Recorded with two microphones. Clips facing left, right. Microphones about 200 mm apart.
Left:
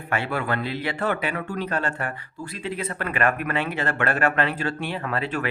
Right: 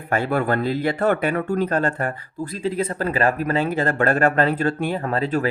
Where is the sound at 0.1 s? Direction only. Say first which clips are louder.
Right 5 dB; 45° right (ahead or behind).